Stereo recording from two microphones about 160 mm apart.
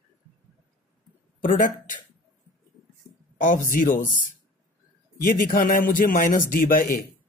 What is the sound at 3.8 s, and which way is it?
Speech, 55° left (ahead or behind).